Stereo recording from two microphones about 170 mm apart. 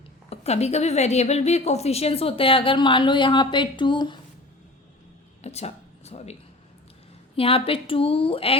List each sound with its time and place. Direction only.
0.3 s a woman's voice: 40° left (ahead or behind)
5.4 s a sound: 40° left (ahead or behind)
7.3 s a woman's voice: 35° left (ahead or behind)